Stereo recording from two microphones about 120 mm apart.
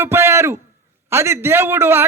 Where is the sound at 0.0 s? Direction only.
20° right (ahead or behind).